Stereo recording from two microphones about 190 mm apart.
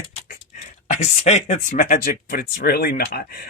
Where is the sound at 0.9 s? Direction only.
40° left (ahead or behind).